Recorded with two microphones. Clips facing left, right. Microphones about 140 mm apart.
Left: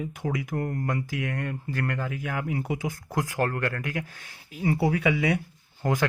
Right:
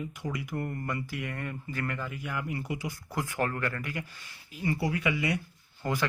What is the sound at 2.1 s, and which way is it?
Speech, 90° left.